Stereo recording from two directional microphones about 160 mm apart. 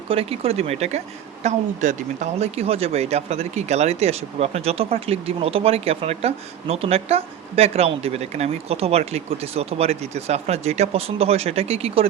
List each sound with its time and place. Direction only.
0.1 s a woman's voice: 40° right (ahead or behind)